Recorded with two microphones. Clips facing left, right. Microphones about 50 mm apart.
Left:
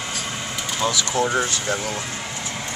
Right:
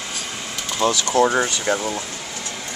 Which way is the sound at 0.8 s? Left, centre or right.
Right.